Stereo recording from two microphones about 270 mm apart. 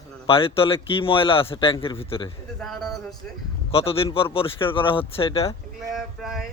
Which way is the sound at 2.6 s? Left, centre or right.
Centre.